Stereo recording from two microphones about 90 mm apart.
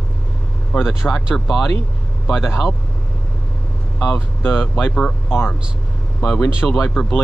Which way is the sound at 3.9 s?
15° left (ahead or behind).